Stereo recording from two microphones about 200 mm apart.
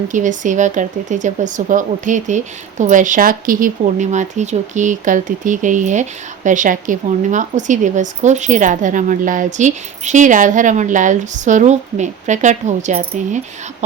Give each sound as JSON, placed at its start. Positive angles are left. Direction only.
{"t": 0.1, "sound": "speech", "side_deg": -40}